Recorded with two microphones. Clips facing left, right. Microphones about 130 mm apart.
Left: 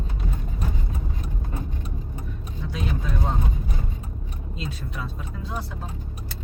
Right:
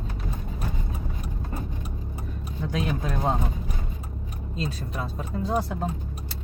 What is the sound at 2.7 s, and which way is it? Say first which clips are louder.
Vehicle: right 2 dB; 50° right (ahead or behind).